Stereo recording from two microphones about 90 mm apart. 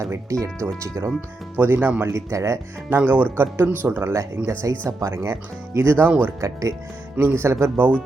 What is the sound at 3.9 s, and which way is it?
Speech, 30° right (ahead or behind).